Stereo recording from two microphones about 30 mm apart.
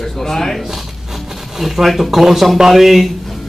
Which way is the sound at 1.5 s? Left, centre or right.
Centre.